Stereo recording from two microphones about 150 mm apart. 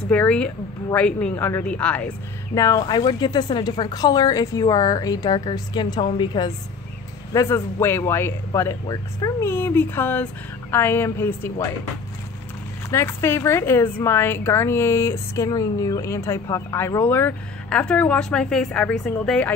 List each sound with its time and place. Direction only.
0.1 s speech: 5° left (ahead or behind)
2.5 s speech: 25° left (ahead or behind)
7.3 s speech: 20° left (ahead or behind)
9.5 s speech: 15° left (ahead or behind)
12.9 s speech: 15° left (ahead or behind)